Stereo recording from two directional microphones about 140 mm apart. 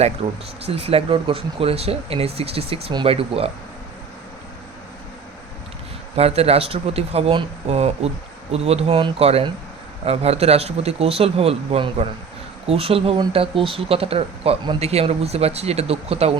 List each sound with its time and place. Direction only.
0.2 s speech: 45° right (ahead or behind)
6.1 s speech: 45° right (ahead or behind)